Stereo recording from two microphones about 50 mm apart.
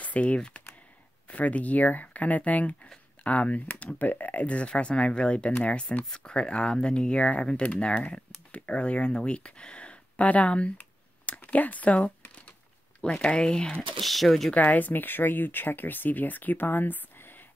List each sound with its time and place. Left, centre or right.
0.0 s speech: left
13.0 s speech: centre
14.0 s speech: centre
14.5 s speech: left